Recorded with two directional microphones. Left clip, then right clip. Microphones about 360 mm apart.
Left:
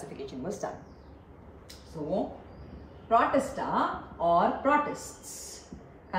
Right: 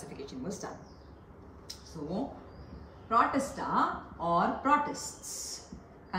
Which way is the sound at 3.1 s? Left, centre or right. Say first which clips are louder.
Left 3 dB; centre.